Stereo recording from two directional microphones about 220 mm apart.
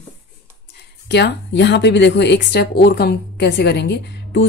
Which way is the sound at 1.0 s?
50° left (ahead or behind).